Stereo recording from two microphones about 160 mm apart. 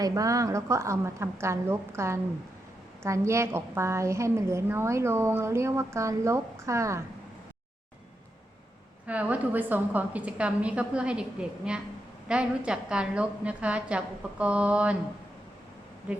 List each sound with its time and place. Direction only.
0.0 s a woman's voice: 20° right (ahead or behind)
9.0 s a woman's voice: 10° right (ahead or behind)
16.1 s speech: 10° right (ahead or behind)